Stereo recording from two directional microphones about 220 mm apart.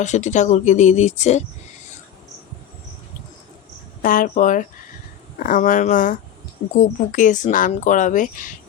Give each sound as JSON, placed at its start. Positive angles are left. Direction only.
{"t": 0.0, "sound": "speech", "side_deg": 30}
{"t": 4.0, "sound": "speech", "side_deg": 40}